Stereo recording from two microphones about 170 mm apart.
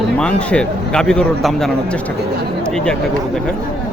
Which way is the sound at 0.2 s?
5° left (ahead or behind).